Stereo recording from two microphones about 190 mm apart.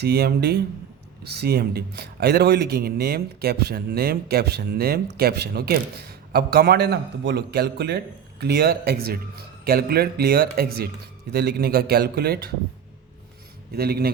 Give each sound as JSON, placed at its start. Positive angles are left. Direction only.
{"t": 0.0, "sound": "speech", "side_deg": -55}
{"t": 13.7, "sound": "speech", "side_deg": -55}